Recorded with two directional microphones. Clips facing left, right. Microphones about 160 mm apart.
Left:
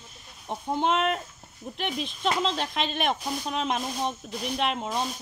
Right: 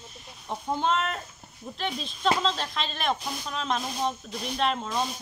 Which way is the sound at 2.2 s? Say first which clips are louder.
Right 1 dB; 15° left (ahead or behind).